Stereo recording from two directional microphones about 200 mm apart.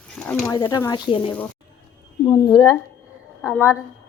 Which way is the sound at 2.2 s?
Centre (ahead or behind).